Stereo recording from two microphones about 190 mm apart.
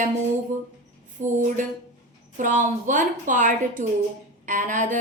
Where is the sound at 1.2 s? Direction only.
40° right (ahead or behind).